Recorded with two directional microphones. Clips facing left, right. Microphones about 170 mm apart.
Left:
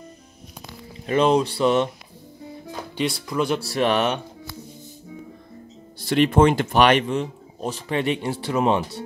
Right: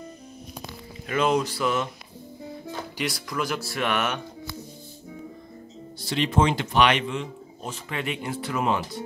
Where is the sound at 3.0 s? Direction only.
30° left (ahead or behind).